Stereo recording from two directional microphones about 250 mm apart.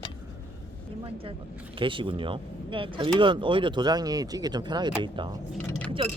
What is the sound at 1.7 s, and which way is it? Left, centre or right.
Speech, centre.